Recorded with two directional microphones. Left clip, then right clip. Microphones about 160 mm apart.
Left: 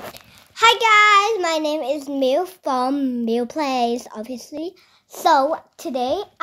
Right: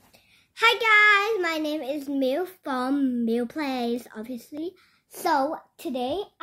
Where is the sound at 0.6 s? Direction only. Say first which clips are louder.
Left 5 dB; 15° right (ahead or behind).